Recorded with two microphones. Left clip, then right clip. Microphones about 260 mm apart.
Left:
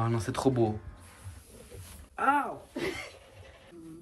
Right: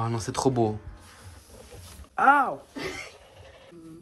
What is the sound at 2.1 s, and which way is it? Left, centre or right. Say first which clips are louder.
Speech: right 7 dB; right.